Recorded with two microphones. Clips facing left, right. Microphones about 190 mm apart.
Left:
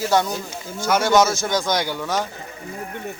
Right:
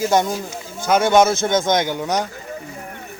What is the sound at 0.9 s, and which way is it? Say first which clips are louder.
Speech: right 3 dB; 20° right (ahead or behind).